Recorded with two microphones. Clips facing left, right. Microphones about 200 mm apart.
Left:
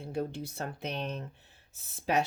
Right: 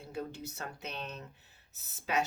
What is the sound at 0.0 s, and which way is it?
Speech, 30° left (ahead or behind).